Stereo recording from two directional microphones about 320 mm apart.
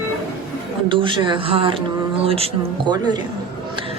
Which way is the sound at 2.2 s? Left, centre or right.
Centre.